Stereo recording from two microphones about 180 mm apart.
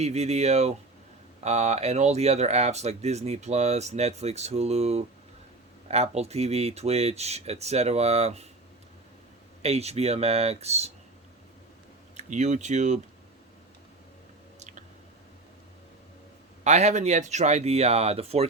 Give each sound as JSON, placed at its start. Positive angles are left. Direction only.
{"t": 0.0, "sound": "speech", "side_deg": -35}
{"t": 9.6, "sound": "speech", "side_deg": -35}
{"t": 12.1, "sound": "speech", "side_deg": -40}
{"t": 14.6, "sound": "chewing", "side_deg": -40}
{"t": 16.6, "sound": "speech", "side_deg": -40}